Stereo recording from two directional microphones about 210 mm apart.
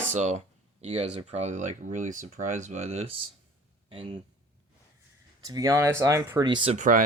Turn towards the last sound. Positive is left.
turn(degrees=-40)  # may be behind; listen again after turning